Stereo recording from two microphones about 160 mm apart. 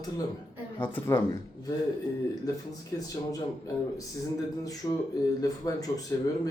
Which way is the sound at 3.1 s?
20° left (ahead or behind).